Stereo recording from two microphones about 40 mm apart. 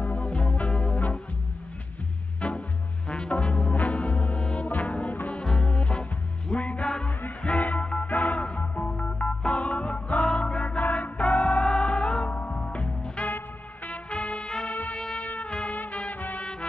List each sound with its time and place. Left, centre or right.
0.0 s music: left
0.9 s music: left
2.4 s music: left
4.4 s music: left
4.6 s music: left
5.4 s music: centre
5.7 s music: left
7.1 s music: left
7.8 s music: left
8.1 s music: left
10.8 s music: left
11.6 s music: left
15.1 s trumpet: left
15.5 s music: left